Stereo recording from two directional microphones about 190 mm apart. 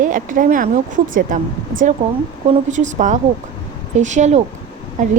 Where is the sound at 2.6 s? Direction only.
40° right (ahead or behind).